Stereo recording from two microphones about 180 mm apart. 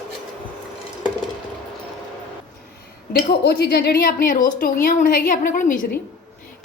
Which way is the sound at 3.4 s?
65° left (ahead or behind).